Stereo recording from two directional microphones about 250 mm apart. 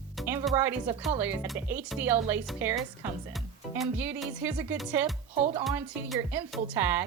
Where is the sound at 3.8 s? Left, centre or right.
Centre.